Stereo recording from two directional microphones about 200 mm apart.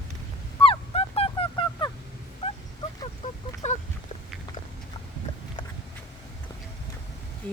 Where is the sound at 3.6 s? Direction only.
35° left (ahead or behind).